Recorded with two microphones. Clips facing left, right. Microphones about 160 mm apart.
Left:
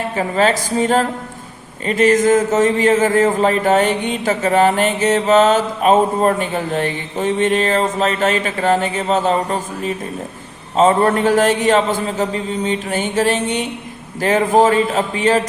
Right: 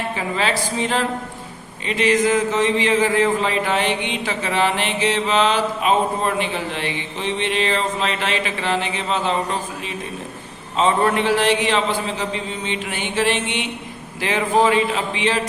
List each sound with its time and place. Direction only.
0.2 s speech: 45° left (ahead or behind)